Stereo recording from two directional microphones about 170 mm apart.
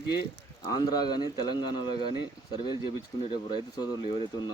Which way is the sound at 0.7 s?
25° left (ahead or behind).